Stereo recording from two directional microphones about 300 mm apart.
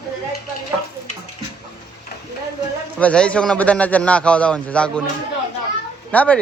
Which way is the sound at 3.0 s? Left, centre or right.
Centre.